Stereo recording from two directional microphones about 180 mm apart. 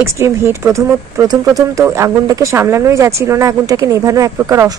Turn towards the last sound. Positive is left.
turn(degrees=-15)  # may be behind; listen again after turning